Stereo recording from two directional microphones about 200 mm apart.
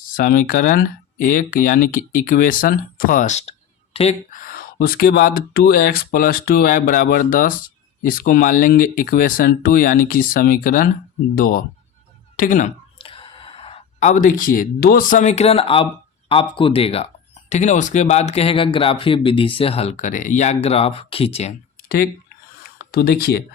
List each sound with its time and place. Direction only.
0.1 s speech: 45° left (ahead or behind)
4.4 s speech: 45° left (ahead or behind)
13.0 s speech: 25° left (ahead or behind); by 22.1 s 45° left (ahead or behind)
22.6 s a sound: 50° left (ahead or behind)